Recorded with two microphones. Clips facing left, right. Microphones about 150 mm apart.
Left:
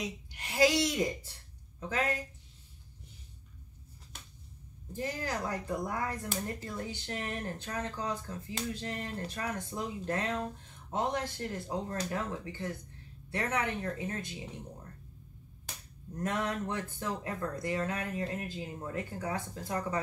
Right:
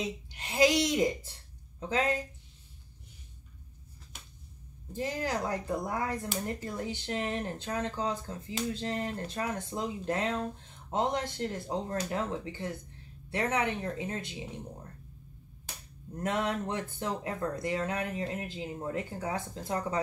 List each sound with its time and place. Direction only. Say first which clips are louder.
0.0 s a woman's voice: right 3 dB; 25° right (ahead or behind)
4.9 s speech: right 3 dB; 20° right (ahead or behind)
16.2 s speech: right 2 dB; 20° right (ahead or behind)